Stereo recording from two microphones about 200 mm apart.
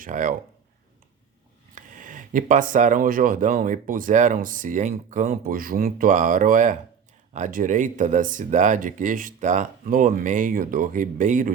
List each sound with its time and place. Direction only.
0.0 s speech: 40° right (ahead or behind)
1.7 s speech: 40° right (ahead or behind)